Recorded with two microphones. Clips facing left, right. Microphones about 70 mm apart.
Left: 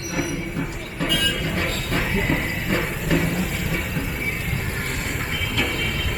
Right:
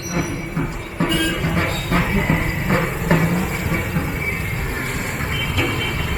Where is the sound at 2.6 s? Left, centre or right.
Right.